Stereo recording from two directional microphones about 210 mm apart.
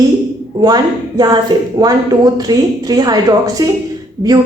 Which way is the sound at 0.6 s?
20° right (ahead or behind).